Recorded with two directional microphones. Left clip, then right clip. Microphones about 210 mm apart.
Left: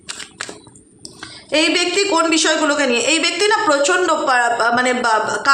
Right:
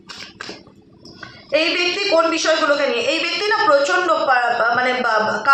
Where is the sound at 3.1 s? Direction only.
45° left (ahead or behind).